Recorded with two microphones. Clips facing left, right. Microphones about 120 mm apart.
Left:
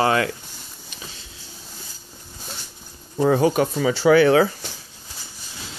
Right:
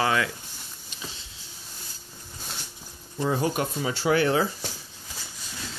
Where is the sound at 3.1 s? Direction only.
70° left (ahead or behind); by 4.5 s 90° left.